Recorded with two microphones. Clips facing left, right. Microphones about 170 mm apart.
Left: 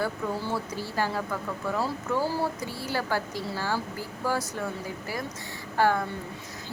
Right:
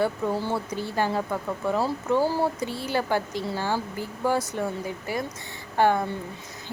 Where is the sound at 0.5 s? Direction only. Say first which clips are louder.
Right 3 dB; 20° right (ahead or behind).